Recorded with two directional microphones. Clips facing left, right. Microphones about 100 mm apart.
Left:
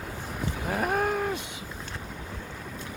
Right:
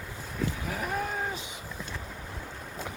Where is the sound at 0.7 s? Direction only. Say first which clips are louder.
Left 6 dB; 55° left (ahead or behind).